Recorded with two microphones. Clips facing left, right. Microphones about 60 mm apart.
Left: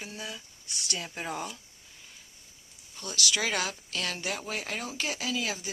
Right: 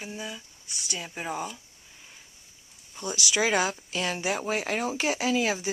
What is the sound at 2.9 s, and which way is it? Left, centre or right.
A woman's voice, centre.